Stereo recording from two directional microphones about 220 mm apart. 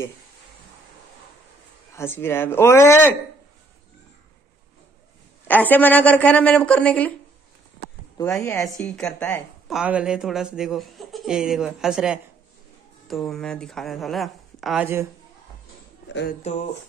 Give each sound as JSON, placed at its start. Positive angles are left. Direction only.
{"t": 2.0, "sound": "a woman's voice", "side_deg": 10}
{"t": 5.5, "sound": "a woman's voice", "side_deg": 10}
{"t": 8.2, "sound": "a woman's voice", "side_deg": 15}
{"t": 8.8, "sound": "speech", "side_deg": 5}
{"t": 16.1, "sound": "speech", "side_deg": 55}